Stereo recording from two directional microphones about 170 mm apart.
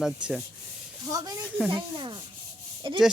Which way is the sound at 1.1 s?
20° right (ahead or behind).